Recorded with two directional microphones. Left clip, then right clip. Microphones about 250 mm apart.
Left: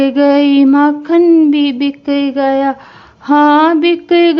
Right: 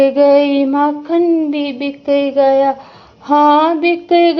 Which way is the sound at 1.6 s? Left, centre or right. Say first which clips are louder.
Left 6 dB; left.